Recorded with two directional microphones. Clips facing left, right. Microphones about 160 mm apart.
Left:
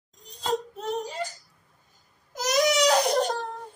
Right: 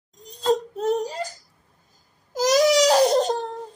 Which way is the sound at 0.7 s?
40° right (ahead or behind).